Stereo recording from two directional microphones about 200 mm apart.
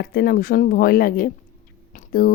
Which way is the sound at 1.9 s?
45° left (ahead or behind).